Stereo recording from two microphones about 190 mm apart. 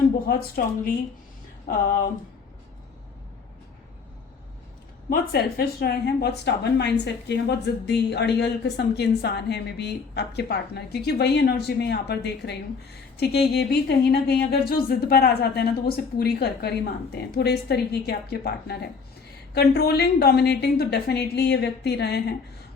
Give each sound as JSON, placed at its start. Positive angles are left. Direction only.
{"t": 0.3, "sound": "a woman's voice", "side_deg": 50}
{"t": 5.0, "sound": "speech", "side_deg": 55}